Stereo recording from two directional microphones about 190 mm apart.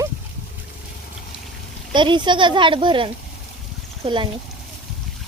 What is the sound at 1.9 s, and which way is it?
A woman's voice, 25° right (ahead or behind).